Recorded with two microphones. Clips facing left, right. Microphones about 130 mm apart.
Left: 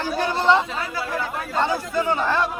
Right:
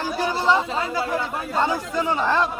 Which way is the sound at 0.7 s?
25° right (ahead or behind).